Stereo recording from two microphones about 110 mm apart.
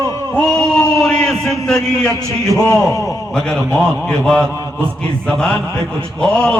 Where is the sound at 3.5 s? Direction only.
5° left (ahead or behind).